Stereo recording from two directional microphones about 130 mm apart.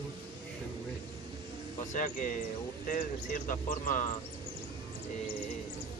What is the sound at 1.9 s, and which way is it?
Speech, 90° left.